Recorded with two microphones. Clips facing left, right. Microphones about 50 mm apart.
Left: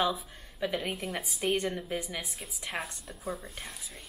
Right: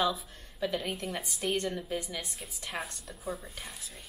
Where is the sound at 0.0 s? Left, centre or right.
Centre.